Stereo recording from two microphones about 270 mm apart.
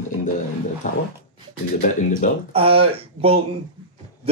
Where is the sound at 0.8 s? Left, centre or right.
Left.